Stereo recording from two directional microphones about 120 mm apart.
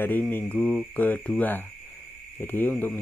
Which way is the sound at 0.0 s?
15° left (ahead or behind).